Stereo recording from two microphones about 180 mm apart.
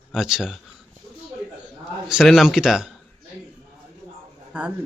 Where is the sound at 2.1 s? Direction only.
Centre (ahead or behind).